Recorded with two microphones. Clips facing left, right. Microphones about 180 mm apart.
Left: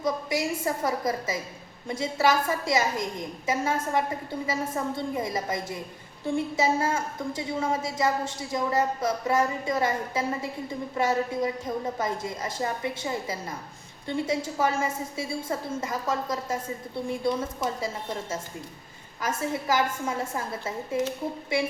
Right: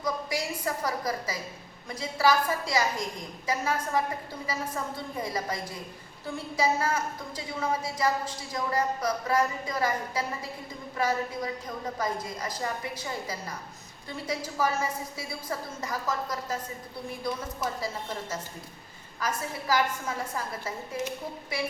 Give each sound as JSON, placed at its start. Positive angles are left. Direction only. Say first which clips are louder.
{"t": 0.0, "sound": "a woman's voice", "louder": "left 4 dB", "side_deg": 25}
{"t": 19.2, "sound": "a woman's voice", "louder": "left 4 dB", "side_deg": 25}